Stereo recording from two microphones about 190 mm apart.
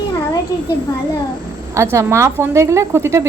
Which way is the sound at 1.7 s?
15° right (ahead or behind).